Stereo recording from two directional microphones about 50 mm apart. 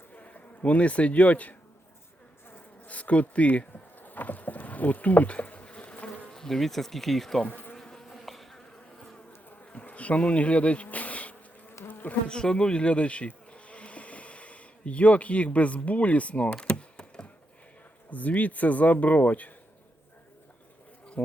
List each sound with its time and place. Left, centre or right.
0.1 s insect: left
2.8 s bee: left
6.3 s bee: centre
7.4 s bee: left
7.8 s insect: centre
9.7 s bee: left
12.3 s bee: centre
16.6 s a sound: centre
18.1 s speech: left